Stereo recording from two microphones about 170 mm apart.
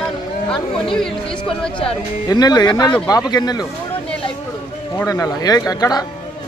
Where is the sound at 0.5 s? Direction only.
30° left (ahead or behind).